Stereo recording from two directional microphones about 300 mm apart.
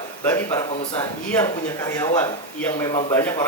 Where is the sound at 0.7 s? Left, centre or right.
Centre.